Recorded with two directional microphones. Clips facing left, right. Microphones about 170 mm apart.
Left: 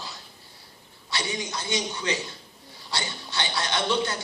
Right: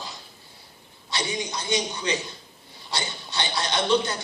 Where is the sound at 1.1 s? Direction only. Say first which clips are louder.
Right 2 dB; 15° right (ahead or behind).